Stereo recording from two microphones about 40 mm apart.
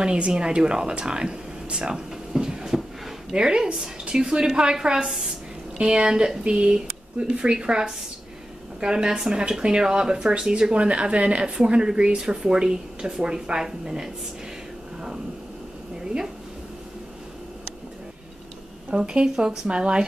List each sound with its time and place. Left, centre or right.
0.0 s a woman's voice: right
5.8 s speech: right
13.0 s a woman's voice: centre
18.9 s speech: right
19.7 s speech: right